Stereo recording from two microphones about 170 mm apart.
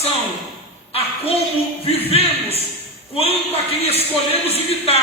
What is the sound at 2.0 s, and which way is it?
Speech, 35° left (ahead or behind).